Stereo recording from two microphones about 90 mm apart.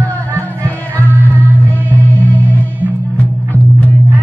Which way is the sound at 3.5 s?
20° left (ahead or behind).